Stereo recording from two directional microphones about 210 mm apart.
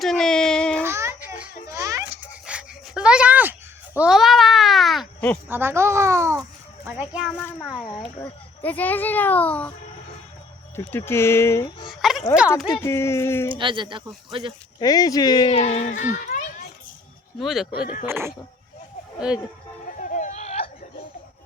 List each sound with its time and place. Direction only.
0.0 s a sound: centre (ahead or behind)
0.9 s children playing: 10° right (ahead or behind)
3.9 s a sound: 5° right (ahead or behind)
5.5 s a child's voice: 10° right (ahead or behind)
7.3 s a child's voice: 10° left (ahead or behind)
10.8 s a child's voice: 10° left (ahead or behind)
12.0 s a sound: centre (ahead or behind)
12.8 s a child's voice: 10° left (ahead or behind)
13.5 s speech: 25° right (ahead or behind)
14.8 s speech: 15° left (ahead or behind); by 16.5 s 40° left (ahead or behind)
17.4 s speech: centre (ahead or behind)
18.0 s a child's voice: 10° right (ahead or behind)
20.0 s a sound: 35° left (ahead or behind)